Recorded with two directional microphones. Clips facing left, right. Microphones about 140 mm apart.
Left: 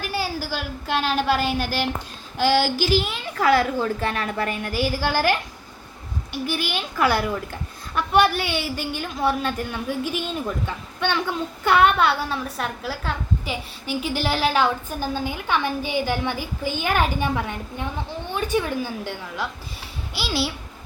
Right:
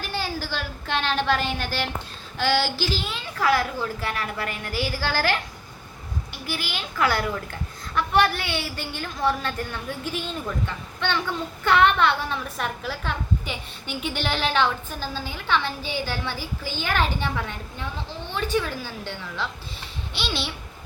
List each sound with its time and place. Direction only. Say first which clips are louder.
0.0 s a woman's voice: left 3 dB; 10° left (ahead or behind)
6.5 s a woman's voice: left 2 dB; 20° left (ahead or behind)